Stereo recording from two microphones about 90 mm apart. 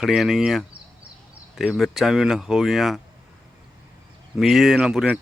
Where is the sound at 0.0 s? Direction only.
Centre (ahead or behind).